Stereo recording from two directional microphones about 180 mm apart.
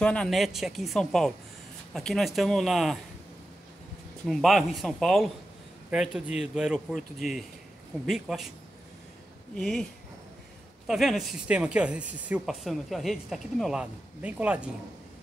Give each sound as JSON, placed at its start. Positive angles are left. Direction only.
{"t": 0.0, "sound": "speech", "side_deg": 5}
{"t": 4.3, "sound": "speech", "side_deg": 0}
{"t": 8.1, "sound": "speech", "side_deg": 0}
{"t": 9.6, "sound": "speech", "side_deg": 5}
{"t": 10.9, "sound": "speech", "side_deg": 0}